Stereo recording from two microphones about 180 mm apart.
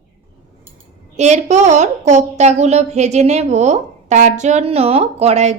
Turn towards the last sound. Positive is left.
turn(degrees=-35)  # may be behind; listen again after turning